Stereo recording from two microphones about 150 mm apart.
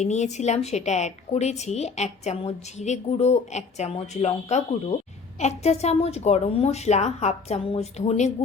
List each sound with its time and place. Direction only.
0.0 s a woman's voice: 50° left (ahead or behind)